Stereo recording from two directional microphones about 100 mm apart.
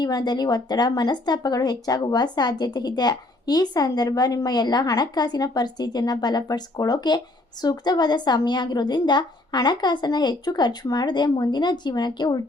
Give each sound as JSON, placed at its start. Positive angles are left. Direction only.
{"t": 0.0, "sound": "speech", "side_deg": 40}